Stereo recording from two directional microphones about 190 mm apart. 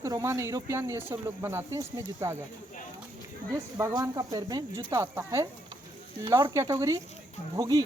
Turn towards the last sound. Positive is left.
turn(degrees=-20)  # may be behind; listen again after turning